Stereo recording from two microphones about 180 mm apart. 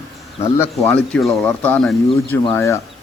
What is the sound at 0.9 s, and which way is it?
Speech, 5° left (ahead or behind).